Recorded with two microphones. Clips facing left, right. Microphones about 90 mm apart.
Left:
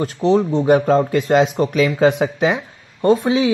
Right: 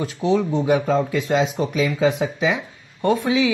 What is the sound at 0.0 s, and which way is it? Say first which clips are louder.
Speech: left 4 dB; 40° left (ahead or behind).